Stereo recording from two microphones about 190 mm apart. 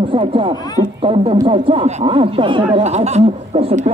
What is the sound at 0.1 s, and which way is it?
Speech, 30° right (ahead or behind).